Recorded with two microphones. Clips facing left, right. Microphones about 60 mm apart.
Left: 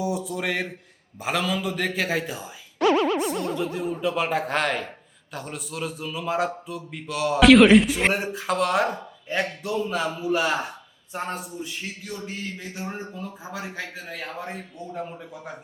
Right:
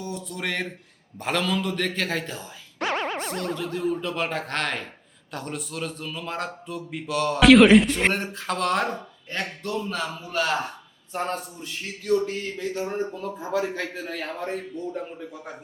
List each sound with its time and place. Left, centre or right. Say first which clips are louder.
0.0 s a man's voice: left 5 dB; centre
2.8 s music: left 7 dB; right
3.4 s a man's voice: even; centre